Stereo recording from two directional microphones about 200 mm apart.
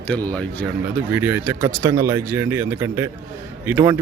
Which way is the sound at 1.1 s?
10° right (ahead or behind).